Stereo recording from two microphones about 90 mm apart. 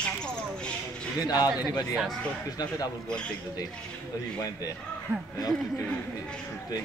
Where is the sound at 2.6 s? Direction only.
45° left (ahead or behind).